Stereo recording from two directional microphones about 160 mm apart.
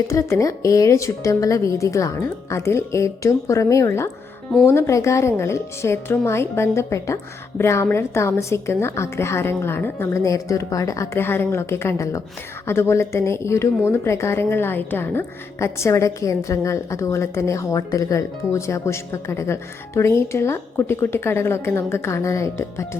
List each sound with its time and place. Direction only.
0.1 s a woman's voice: 20° left (ahead or behind)